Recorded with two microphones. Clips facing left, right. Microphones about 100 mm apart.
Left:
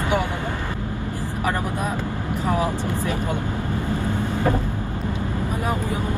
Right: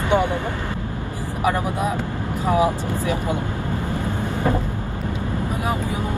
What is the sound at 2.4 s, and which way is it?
Speech, 15° right (ahead or behind).